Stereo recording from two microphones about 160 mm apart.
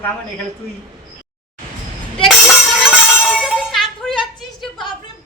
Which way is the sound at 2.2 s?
Centre (ahead or behind).